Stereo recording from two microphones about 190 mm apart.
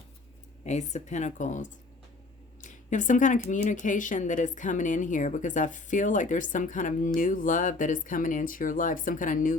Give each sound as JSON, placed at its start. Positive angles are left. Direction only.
{"t": 0.6, "sound": "speech", "side_deg": 35}